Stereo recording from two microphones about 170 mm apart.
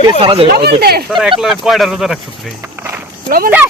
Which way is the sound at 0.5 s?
70° right (ahead or behind).